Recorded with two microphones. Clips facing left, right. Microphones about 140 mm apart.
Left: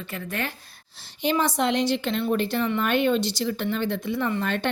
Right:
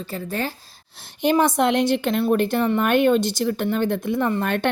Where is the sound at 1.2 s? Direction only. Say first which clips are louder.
Right 5 dB; 50° right (ahead or behind).